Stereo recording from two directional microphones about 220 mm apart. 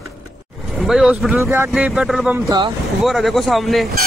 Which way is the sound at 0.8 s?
Centre (ahead or behind).